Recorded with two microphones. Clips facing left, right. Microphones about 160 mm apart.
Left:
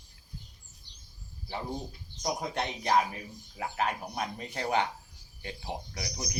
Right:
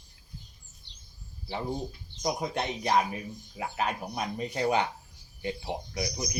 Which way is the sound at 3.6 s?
20° right (ahead or behind).